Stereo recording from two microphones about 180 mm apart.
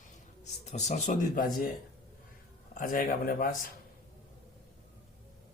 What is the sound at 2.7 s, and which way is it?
Speech, 50° left (ahead or behind).